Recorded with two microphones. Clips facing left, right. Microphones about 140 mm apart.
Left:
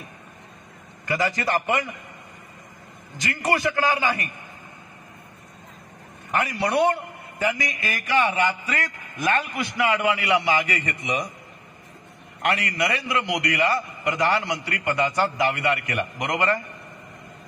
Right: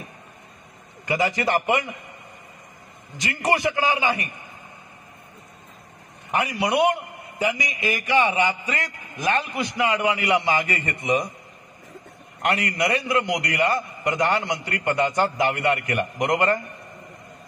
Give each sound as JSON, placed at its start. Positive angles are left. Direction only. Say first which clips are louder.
{"t": 1.0, "sound": "a man's voice", "louder": "right 2 dB", "side_deg": -20}
{"t": 3.2, "sound": "a man's voice", "louder": "right 1 dB", "side_deg": -20}
{"t": 6.3, "sound": "a man's voice", "louder": "right 1 dB", "side_deg": -15}
{"t": 10.1, "sound": "a man's voice", "louder": "even", "side_deg": -45}
{"t": 12.4, "sound": "a man's voice", "louder": "right 1 dB", "side_deg": -40}